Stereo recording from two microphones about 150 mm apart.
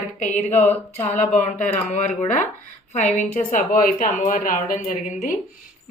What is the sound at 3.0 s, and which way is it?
A woman's voice, 55° left (ahead or behind).